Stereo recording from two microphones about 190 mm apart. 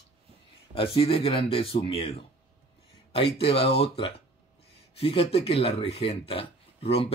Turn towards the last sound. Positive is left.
turn(degrees=30)  # may be behind; listen again after turning